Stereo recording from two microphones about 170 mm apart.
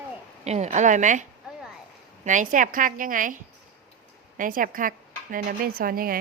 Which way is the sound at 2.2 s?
50° right (ahead or behind).